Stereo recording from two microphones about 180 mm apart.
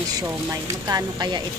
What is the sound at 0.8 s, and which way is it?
Speech, 25° right (ahead or behind).